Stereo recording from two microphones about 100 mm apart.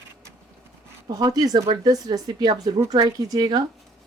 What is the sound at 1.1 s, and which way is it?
Speech, 40° right (ahead or behind).